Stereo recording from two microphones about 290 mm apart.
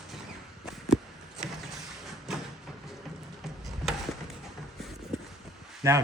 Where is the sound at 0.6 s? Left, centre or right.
Centre.